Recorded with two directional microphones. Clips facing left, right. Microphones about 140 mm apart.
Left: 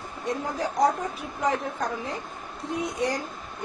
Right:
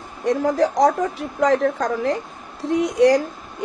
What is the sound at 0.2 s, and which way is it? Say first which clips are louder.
A woman's voice: right 11 dB; 90° right.